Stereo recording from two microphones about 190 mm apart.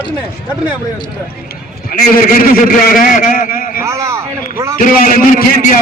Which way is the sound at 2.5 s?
50° left (ahead or behind).